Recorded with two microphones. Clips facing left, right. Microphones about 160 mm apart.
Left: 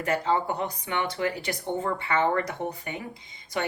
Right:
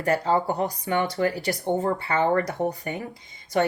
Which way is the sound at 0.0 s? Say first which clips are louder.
Right 3 dB; 40° right (ahead or behind).